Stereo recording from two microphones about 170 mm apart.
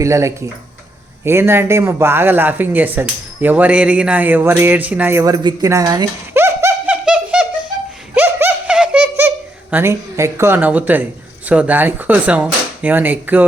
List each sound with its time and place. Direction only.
0.0 s speech: 20° right (ahead or behind)
6.9 s bird: 5° right (ahead or behind)
8.1 s a sound: 10° right (ahead or behind)
11.4 s speech: 10° right (ahead or behind)